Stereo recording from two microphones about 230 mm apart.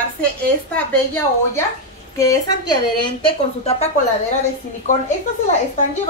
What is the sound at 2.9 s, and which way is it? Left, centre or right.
Speech, left.